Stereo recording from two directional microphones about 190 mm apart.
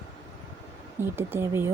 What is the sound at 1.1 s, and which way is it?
Speech, 10° right (ahead or behind).